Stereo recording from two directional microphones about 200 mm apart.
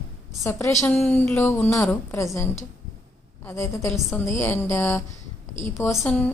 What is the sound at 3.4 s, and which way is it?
A woman's voice, 15° left (ahead or behind).